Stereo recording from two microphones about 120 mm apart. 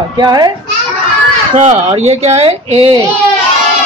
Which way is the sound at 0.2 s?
35° right (ahead or behind).